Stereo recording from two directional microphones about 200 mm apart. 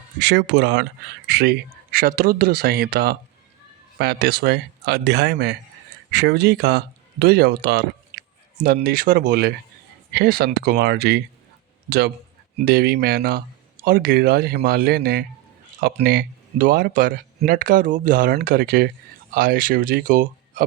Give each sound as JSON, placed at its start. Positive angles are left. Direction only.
{"t": 0.2, "sound": "speech", "side_deg": -60}